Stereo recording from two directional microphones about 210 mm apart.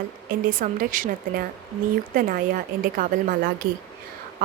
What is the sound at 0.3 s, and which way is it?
Speech, 40° right (ahead or behind).